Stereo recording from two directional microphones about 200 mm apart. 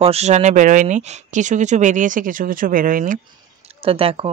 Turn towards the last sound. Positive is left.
turn(degrees=-30)  # may be behind; listen again after turning